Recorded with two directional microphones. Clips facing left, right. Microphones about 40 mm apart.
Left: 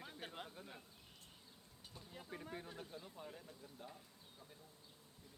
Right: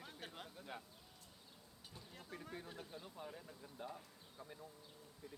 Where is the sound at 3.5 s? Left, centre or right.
Centre.